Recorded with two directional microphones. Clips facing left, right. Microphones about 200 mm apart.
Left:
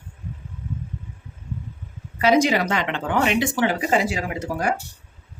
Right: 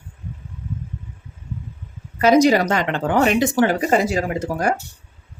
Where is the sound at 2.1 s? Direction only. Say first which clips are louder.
Right 4 dB; 40° right (ahead or behind).